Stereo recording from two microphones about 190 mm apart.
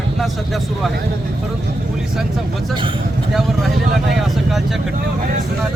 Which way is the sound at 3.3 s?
Centre (ahead or behind).